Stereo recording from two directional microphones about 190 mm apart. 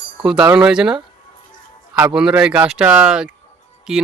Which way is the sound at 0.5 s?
5° right (ahead or behind).